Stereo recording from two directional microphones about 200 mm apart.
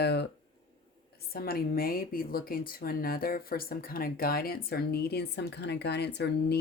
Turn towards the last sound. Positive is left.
turn(degrees=55)  # may be behind; listen again after turning